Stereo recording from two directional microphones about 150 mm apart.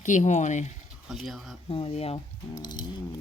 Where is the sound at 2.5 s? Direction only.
30° left (ahead or behind).